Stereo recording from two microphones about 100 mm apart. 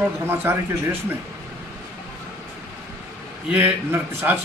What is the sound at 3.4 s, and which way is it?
Speech, 15° right (ahead or behind).